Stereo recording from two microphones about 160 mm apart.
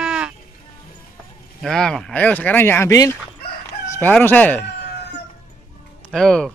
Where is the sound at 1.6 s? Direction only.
5° left (ahead or behind).